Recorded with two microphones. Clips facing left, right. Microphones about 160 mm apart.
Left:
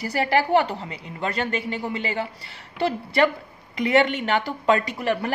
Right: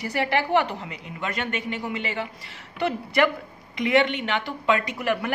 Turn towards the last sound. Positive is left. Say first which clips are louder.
# left 1 dB
turn(degrees=30)  # may be behind; listen again after turning